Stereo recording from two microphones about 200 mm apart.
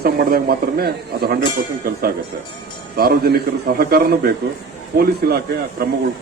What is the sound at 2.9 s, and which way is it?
Speech, 50° right (ahead or behind).